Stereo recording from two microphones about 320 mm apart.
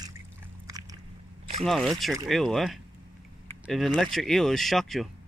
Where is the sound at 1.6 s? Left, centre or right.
Centre.